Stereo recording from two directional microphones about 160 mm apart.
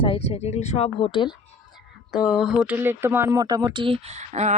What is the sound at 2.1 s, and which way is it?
Speech, 5° right (ahead or behind).